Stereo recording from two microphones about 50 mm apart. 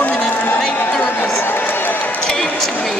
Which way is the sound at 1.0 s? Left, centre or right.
Left.